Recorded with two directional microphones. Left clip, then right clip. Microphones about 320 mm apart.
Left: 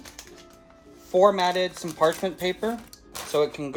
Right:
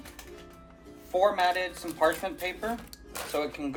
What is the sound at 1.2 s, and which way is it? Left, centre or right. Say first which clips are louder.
Speech: left 5 dB; left.